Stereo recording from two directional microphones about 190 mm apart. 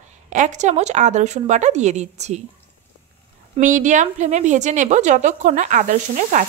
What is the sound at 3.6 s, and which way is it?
A woman's voice, 40° right (ahead or behind).